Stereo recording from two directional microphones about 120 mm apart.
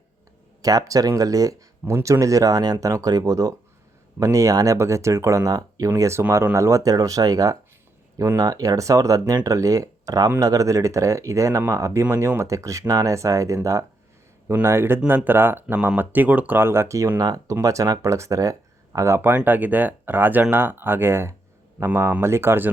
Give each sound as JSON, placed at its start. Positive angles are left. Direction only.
{"t": 0.6, "sound": "speech", "side_deg": -30}